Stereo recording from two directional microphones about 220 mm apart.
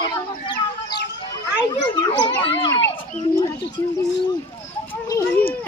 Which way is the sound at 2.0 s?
20° left (ahead or behind).